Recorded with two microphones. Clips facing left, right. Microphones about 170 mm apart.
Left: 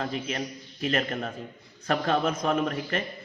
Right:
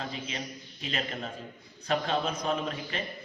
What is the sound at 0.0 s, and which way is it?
A man's voice, 55° left (ahead or behind).